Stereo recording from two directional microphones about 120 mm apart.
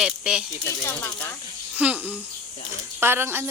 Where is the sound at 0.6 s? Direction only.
20° left (ahead or behind).